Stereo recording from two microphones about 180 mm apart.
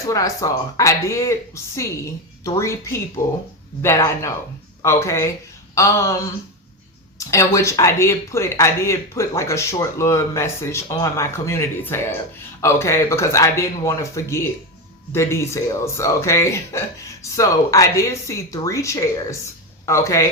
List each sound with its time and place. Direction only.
0.1 s speech: 20° left (ahead or behind)